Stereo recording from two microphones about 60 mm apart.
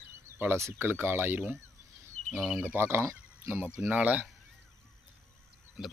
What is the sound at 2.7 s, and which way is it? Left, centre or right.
Speech, right.